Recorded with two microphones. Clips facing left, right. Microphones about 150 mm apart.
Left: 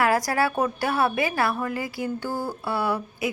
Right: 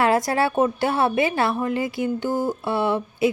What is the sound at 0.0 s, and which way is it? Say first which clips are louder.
A woman's voice: right 2 dB; 25° right (ahead or behind).